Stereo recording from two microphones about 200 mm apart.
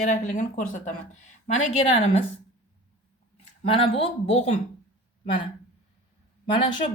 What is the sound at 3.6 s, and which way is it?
Speech, 25° left (ahead or behind).